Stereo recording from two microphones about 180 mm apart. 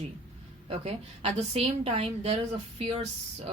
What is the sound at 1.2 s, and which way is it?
A woman's voice, 35° right (ahead or behind).